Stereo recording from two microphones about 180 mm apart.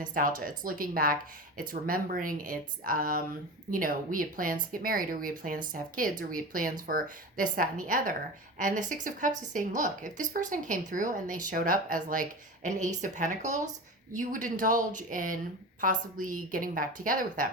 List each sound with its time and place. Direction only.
0.0 s a woman's voice: 50° right (ahead or behind)